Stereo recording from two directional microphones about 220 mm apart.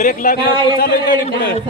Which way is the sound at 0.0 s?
35° left (ahead or behind).